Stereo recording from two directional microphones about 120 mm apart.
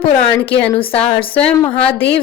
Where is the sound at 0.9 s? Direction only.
55° left (ahead or behind).